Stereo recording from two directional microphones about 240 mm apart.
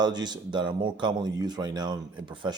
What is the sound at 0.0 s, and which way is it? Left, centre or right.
Speech, centre.